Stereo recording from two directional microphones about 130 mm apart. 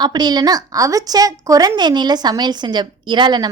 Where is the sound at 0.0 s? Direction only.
35° right (ahead or behind).